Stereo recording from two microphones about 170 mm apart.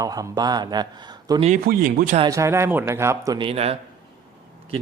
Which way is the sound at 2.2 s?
20° right (ahead or behind).